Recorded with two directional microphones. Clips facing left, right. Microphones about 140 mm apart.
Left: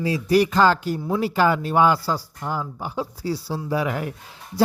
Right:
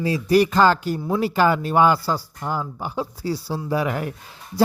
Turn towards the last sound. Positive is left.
turn(degrees=-45)  # may be behind; listen again after turning